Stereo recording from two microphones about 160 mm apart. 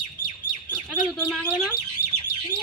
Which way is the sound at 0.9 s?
5° left (ahead or behind).